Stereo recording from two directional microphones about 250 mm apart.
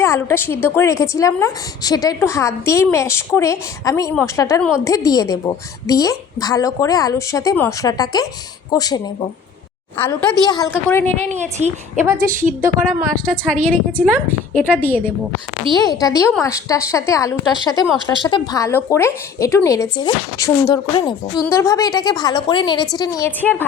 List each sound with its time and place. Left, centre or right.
0.0 s a woman's voice: centre
10.0 s a woman's voice: centre
11.2 s a woman's voice: right
13.1 s a woman's voice: centre
13.9 s a woman's voice: centre
14.8 s a woman's voice: centre